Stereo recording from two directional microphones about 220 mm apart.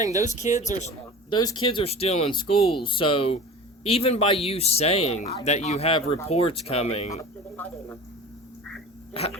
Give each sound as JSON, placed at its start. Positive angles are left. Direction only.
{"t": 0.0, "sound": "speech", "side_deg": -15}
{"t": 0.3, "sound": "speech", "side_deg": 30}
{"t": 1.3, "sound": "speech", "side_deg": 20}
{"t": 7.5, "sound": "speech", "side_deg": 10}